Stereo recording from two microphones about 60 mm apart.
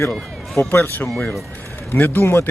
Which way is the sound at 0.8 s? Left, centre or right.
Left.